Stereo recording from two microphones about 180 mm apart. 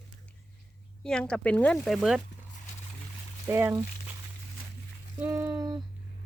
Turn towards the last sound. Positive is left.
turn(degrees=-20)  # may be behind; listen again after turning